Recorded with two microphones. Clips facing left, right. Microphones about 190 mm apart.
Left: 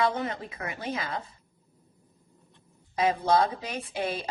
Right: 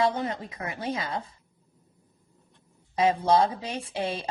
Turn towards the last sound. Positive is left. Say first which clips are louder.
# right 1 dB
turn(degrees=-30)  # may be behind; listen again after turning